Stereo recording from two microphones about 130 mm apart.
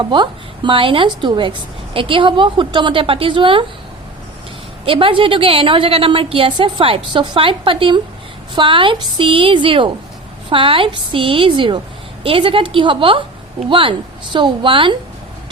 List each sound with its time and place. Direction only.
0.0 s speech: 35° right (ahead or behind)
4.9 s a woman's voice: 45° right (ahead or behind)